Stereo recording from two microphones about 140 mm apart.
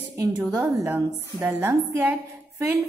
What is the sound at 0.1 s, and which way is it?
A woman's voice, 15° right (ahead or behind).